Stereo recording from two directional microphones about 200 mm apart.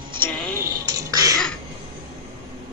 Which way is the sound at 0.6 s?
20° right (ahead or behind).